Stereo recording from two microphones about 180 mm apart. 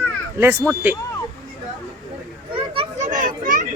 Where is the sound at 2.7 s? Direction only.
30° right (ahead or behind).